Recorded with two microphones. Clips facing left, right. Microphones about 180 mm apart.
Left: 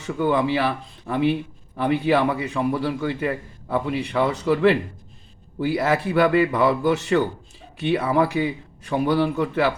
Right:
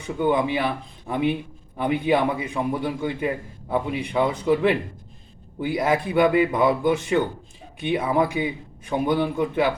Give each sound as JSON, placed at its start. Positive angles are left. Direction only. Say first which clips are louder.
{"t": 0.0, "sound": "a man's voice", "louder": "left 1 dB", "side_deg": -20}